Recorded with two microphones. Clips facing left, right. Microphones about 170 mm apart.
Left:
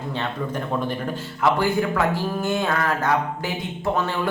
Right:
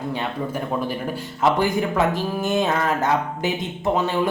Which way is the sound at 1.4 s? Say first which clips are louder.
Right 1 dB; 20° right (ahead or behind).